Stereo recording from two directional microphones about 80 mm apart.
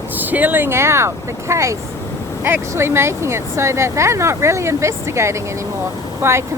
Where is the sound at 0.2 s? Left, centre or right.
Right.